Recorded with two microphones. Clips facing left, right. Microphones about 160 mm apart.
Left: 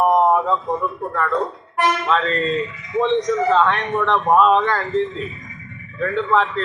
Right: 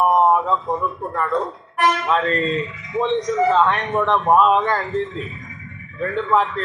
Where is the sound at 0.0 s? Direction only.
Centre (ahead or behind).